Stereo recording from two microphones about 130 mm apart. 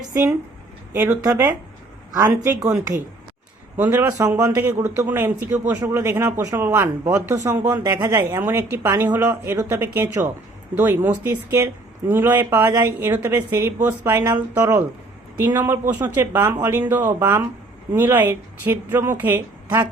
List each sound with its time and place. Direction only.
0.1 s speech: 20° right (ahead or behind)
3.8 s speech: 15° right (ahead or behind)